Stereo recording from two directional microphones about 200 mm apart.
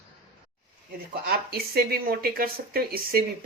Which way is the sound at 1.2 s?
50° right (ahead or behind).